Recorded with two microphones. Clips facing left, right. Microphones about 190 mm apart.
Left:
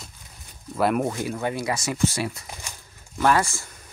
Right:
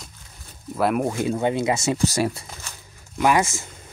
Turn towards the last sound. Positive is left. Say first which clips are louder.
# right 1 dB
turn(degrees=-20)  # may be behind; listen again after turning